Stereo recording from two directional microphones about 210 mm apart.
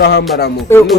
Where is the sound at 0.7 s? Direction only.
10° left (ahead or behind).